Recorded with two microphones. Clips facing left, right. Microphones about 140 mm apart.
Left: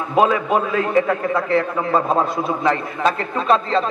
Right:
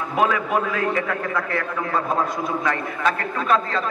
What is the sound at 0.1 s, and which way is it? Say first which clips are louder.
A man's voice: left 5 dB; 25° left (ahead or behind).